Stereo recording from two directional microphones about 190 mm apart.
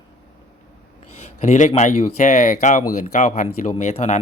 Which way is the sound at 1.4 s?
40° left (ahead or behind).